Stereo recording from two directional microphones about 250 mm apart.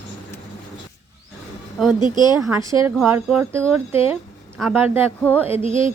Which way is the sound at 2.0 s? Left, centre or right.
Centre.